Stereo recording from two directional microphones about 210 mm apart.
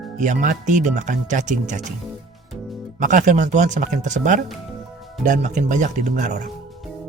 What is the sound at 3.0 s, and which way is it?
Speech, 35° right (ahead or behind).